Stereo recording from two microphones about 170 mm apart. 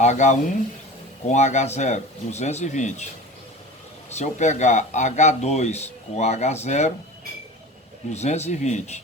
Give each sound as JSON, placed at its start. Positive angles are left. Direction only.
{"t": 0.0, "sound": "speech", "side_deg": 45}
{"t": 4.1, "sound": "speech", "side_deg": 40}
{"t": 8.1, "sound": "speech", "side_deg": 40}